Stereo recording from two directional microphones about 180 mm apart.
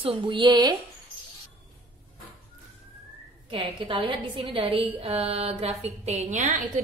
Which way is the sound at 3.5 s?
30° right (ahead or behind).